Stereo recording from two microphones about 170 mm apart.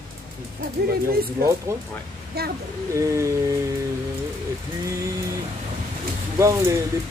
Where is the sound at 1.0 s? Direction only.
65° right (ahead or behind).